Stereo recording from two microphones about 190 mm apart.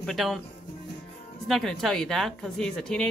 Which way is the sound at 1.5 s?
Centre (ahead or behind).